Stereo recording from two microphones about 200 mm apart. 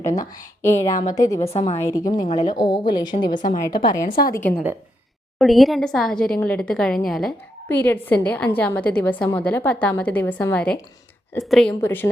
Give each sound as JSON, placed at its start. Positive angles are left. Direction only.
{"t": 0.0, "sound": "a woman's voice", "side_deg": 15}
{"t": 1.4, "sound": "a woman's voice", "side_deg": 30}
{"t": 1.7, "sound": "a woman's voice", "side_deg": 15}
{"t": 4.1, "sound": "a woman's voice", "side_deg": 45}
{"t": 4.4, "sound": "a woman's voice", "side_deg": 10}